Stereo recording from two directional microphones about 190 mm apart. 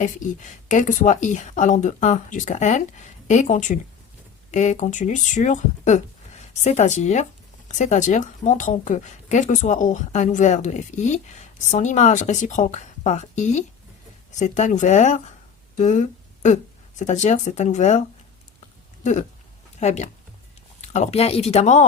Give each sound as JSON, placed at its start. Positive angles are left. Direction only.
{"t": 0.0, "sound": "speech", "side_deg": 40}
{"t": 19.8, "sound": "speech", "side_deg": 35}